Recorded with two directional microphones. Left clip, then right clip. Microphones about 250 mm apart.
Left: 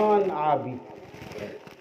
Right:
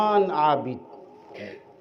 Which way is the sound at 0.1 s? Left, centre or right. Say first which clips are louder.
Right 2 dB; right.